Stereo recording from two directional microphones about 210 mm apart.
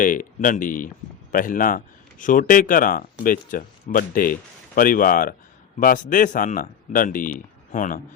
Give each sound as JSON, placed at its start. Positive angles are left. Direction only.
{"t": 0.0, "sound": "speech", "side_deg": 40}